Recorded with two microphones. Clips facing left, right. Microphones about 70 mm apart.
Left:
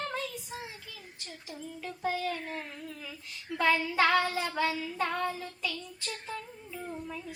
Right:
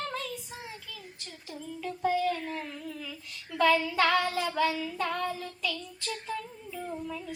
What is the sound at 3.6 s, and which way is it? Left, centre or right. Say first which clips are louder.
Child singing: right 2 dB; centre.